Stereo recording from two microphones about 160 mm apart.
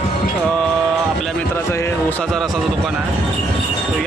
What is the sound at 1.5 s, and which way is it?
Speech, 15° left (ahead or behind).